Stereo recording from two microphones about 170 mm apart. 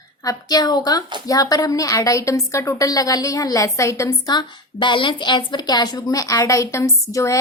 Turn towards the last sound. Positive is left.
turn(degrees=20)  # may be behind; listen again after turning